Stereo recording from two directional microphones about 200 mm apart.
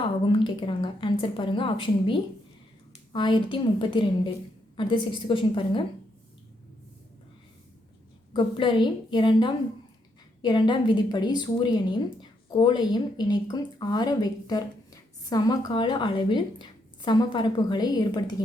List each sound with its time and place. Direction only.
0.0 s a woman's voice: 25° left (ahead or behind)
8.3 s a woman's voice: 25° left (ahead or behind)